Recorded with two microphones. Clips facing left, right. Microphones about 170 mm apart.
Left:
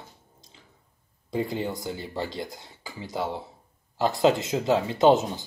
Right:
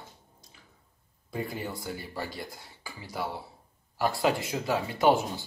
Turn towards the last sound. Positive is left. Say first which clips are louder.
# left 5 dB
turn(degrees=20)  # may be behind; listen again after turning